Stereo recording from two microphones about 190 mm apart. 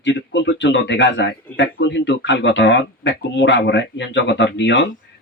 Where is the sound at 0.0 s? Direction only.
70° left (ahead or behind).